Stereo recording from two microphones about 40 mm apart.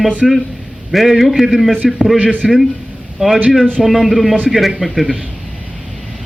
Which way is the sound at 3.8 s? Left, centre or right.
Centre.